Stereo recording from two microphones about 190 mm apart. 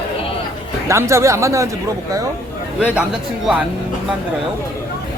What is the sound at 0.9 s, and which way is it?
Speech, 15° right (ahead or behind).